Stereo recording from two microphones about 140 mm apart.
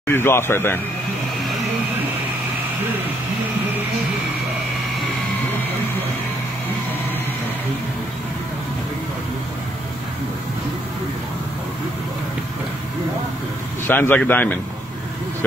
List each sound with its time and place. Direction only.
0.1 s a man's voice: 15° left (ahead or behind)
13.8 s a man's voice: 15° left (ahead or behind)